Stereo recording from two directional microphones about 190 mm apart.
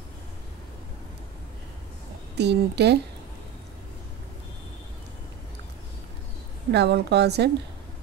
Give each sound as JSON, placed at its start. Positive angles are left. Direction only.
{"t": 2.3, "sound": "a woman's voice", "side_deg": -60}
{"t": 6.7, "sound": "a woman's voice", "side_deg": -60}